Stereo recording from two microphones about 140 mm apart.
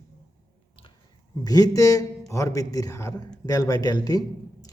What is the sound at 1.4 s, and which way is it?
Speech, 25° left (ahead or behind).